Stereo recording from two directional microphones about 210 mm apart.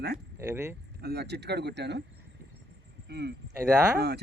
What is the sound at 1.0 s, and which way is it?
Speech, 50° right (ahead or behind).